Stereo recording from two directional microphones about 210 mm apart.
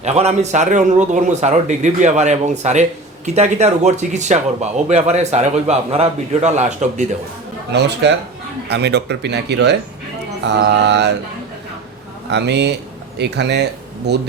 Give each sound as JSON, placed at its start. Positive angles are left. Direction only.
{"t": 0.0, "sound": "speech", "side_deg": -30}
{"t": 7.7, "sound": "speech", "side_deg": -55}
{"t": 10.4, "sound": "mantra", "side_deg": -55}
{"t": 12.3, "sound": "speech", "side_deg": -55}